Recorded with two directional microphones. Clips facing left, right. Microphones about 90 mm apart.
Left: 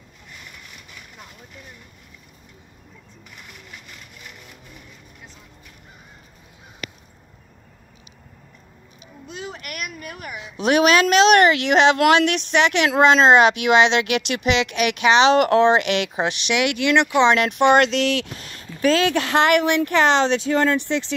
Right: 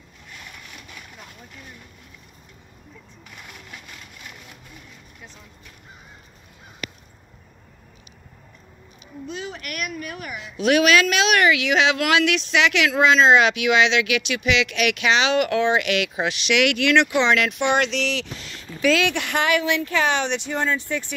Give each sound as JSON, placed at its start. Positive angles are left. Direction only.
{"t": 9.6, "sound": "speech", "side_deg": 25}
{"t": 11.4, "sound": "speech", "side_deg": 55}
{"t": 12.8, "sound": "speech", "side_deg": 40}
{"t": 14.7, "sound": "speech", "side_deg": 30}
{"t": 17.7, "sound": "speech", "side_deg": 45}
{"t": 19.3, "sound": "speech", "side_deg": 75}
{"t": 19.7, "sound": "speech", "side_deg": 60}